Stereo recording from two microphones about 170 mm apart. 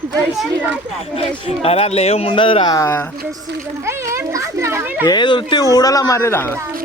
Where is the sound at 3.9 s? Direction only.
15° right (ahead or behind).